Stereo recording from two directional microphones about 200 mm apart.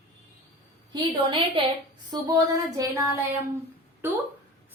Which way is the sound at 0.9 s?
25° right (ahead or behind).